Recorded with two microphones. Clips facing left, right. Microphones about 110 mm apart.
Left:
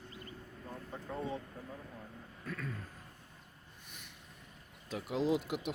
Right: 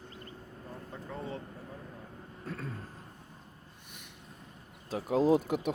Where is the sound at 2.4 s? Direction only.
35° right (ahead or behind).